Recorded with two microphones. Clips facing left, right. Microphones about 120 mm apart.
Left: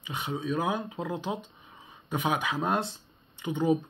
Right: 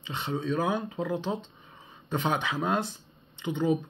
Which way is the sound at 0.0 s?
15° left (ahead or behind).